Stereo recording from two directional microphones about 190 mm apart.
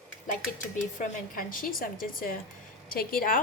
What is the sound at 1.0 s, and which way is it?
A woman's voice, 45° left (ahead or behind).